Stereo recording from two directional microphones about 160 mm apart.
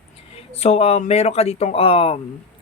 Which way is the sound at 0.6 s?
40° left (ahead or behind).